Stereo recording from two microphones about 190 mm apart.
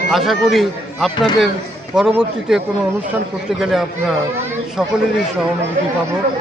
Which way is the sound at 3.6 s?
Centre (ahead or behind).